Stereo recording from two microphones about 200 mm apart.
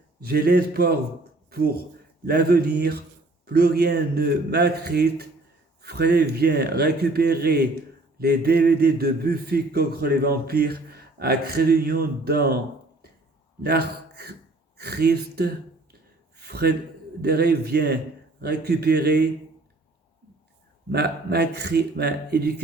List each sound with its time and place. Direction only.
0.2 s a man's voice: 50° right (ahead or behind)
13.6 s a man's voice: 55° right (ahead or behind)
20.9 s a man's voice: 55° right (ahead or behind)